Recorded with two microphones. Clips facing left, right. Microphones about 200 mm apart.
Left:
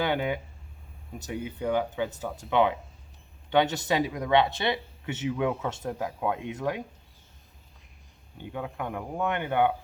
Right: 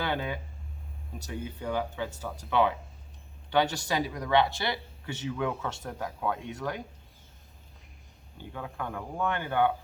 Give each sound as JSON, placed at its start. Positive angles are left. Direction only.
{"t": 0.0, "sound": "a sound", "side_deg": 20}
{"t": 1.3, "sound": "speech", "side_deg": 15}
{"t": 8.5, "sound": "speech", "side_deg": 20}